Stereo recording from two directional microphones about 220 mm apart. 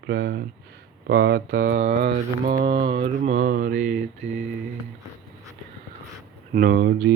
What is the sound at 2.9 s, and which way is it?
Mantra, 25° right (ahead or behind).